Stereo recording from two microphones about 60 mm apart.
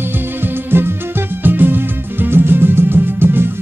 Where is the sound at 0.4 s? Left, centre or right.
Right.